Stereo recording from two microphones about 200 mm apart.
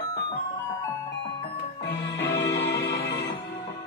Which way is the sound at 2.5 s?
60° left (ahead or behind).